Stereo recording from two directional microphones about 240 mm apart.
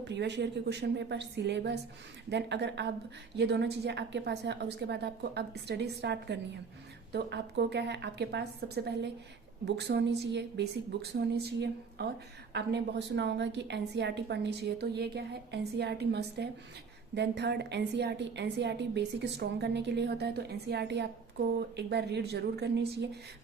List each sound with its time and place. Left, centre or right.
0.0 s a woman's voice: right